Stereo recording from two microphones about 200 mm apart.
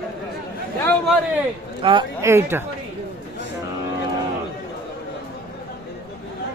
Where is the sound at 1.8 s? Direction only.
25° right (ahead or behind).